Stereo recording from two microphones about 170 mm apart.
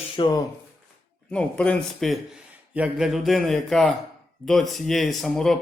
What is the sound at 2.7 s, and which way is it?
Speech, 5° right (ahead or behind).